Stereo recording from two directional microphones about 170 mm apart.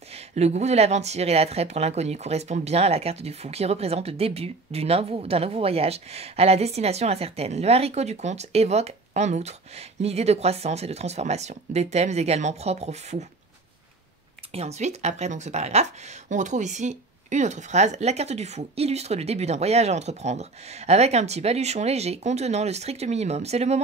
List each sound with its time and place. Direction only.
0.1 s speech: 40° right (ahead or behind)
14.5 s speech: 40° right (ahead or behind)